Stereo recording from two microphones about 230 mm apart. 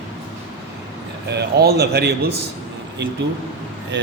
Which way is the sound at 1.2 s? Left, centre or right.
Right.